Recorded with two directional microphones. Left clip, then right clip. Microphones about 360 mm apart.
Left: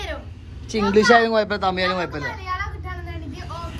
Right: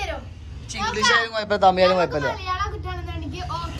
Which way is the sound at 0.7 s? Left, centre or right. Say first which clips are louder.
Left 4 dB; centre.